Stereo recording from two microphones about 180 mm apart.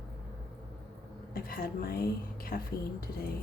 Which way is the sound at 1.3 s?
55° left (ahead or behind).